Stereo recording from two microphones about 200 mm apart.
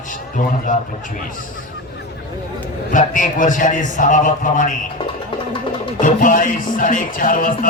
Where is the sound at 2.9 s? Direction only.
40° left (ahead or behind).